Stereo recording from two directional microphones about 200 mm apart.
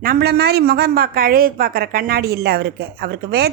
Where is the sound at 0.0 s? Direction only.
50° right (ahead or behind).